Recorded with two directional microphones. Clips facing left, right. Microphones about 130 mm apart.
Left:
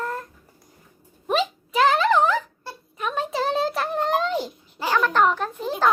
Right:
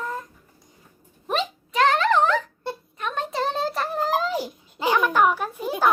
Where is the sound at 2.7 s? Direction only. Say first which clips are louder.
Right 7 dB; 25° right (ahead or behind).